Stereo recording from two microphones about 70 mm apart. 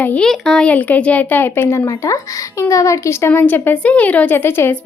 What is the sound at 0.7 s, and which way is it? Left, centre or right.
Speech, left.